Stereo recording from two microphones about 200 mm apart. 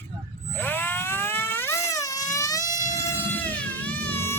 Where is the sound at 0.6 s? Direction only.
10° left (ahead or behind).